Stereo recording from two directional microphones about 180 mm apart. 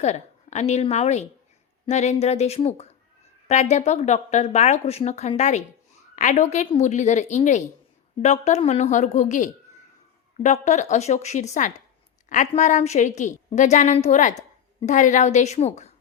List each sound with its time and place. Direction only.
0.0 s a woman's voice: 40° left (ahead or behind)